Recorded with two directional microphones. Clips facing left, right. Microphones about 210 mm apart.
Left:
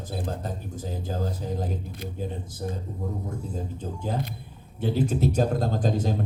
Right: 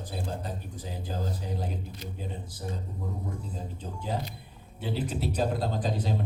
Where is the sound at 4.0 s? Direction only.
50° left (ahead or behind).